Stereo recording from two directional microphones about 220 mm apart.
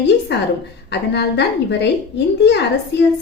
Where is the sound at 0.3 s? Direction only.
50° left (ahead or behind).